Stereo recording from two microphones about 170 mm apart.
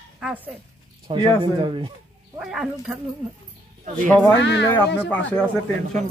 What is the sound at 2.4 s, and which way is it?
Speech, 5° right (ahead or behind).